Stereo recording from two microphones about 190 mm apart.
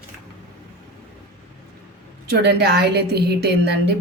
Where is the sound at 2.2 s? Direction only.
60° right (ahead or behind).